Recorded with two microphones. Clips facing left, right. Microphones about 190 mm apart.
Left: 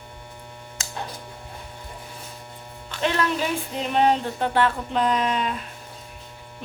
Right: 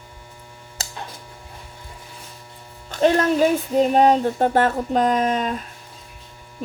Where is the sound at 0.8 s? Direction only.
35° right (ahead or behind).